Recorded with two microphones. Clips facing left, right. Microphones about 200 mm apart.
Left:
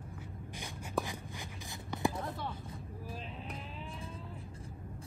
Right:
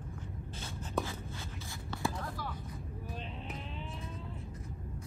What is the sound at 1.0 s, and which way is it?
Writing, centre (ahead or behind).